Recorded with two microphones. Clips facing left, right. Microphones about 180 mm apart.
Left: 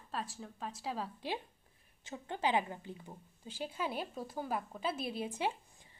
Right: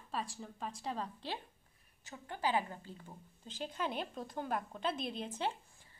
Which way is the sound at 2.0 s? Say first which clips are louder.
Left 2 dB; 25° left (ahead or behind).